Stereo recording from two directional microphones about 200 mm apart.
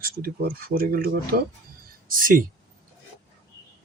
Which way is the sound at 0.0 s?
50° right (ahead or behind).